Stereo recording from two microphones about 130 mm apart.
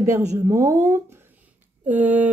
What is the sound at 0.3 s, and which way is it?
Speech, 25° right (ahead or behind).